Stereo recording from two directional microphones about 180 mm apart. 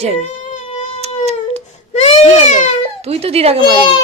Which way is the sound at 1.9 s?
40° left (ahead or behind).